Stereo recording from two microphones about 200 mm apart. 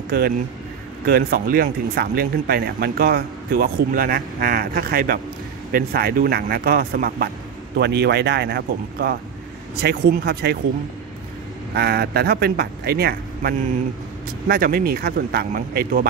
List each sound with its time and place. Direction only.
1.0 s speech: 50° right (ahead or behind)
11.7 s speech: 55° right (ahead or behind)